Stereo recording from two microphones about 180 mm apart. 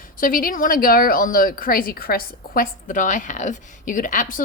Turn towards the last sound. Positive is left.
turn(degrees=45)  # may be behind; listen again after turning